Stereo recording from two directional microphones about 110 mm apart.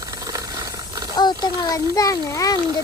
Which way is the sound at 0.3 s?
30° right (ahead or behind).